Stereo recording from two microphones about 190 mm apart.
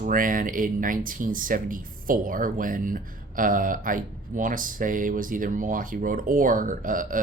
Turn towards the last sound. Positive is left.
turn(degrees=-45)  # may be behind; listen again after turning